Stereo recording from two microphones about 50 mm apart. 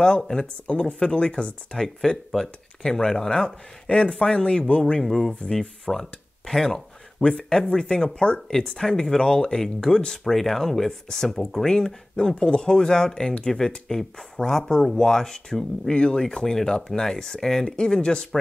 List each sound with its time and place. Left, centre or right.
0.3 s speech: centre
5.0 s speech: centre